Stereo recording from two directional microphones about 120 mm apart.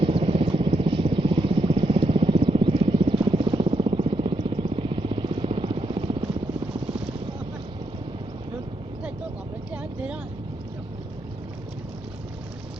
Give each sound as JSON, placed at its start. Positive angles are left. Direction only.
{"t": 0.0, "sound": "vehicle", "side_deg": -50}